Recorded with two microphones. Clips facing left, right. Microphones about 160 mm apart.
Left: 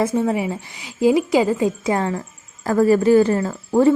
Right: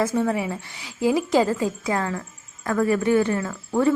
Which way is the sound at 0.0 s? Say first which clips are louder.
Left 3 dB; 20° left (ahead or behind).